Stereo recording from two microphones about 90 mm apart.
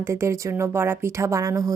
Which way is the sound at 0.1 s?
35° right (ahead or behind).